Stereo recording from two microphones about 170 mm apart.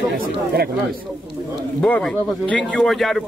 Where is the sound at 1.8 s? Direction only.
5° left (ahead or behind).